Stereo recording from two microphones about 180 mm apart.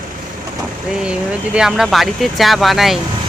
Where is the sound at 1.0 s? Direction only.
5° right (ahead or behind).